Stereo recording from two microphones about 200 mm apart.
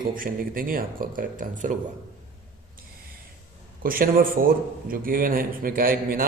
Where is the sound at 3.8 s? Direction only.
45° right (ahead or behind).